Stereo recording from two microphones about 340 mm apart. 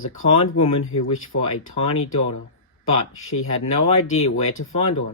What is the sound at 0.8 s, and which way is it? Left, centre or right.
Speech, left.